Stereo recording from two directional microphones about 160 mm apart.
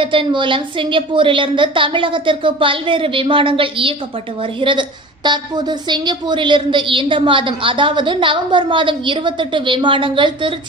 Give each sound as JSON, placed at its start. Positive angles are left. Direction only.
{"t": 0.0, "sound": "a woman's voice", "side_deg": -30}